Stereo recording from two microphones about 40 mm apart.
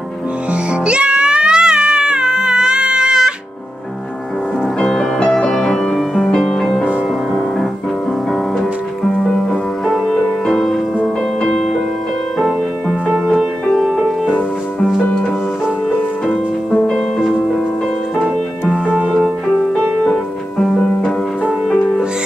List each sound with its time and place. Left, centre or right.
0.5 s music: right
4.7 s music: centre
5.9 s music: centre
6.3 s music: centre
9.2 s music: centre
11.0 s music: left
16.3 s music: centre
21.6 s music: left